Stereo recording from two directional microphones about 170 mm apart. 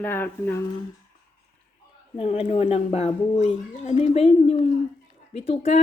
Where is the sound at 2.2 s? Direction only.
35° left (ahead or behind).